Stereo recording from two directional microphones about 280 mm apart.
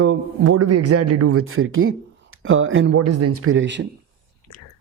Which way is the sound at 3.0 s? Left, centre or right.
Right.